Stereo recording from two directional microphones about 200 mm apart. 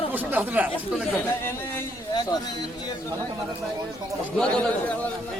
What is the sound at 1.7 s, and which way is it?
Speech, 20° left (ahead or behind).